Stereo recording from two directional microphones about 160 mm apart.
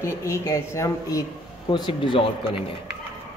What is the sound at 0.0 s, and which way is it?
A woman's voice, 20° left (ahead or behind).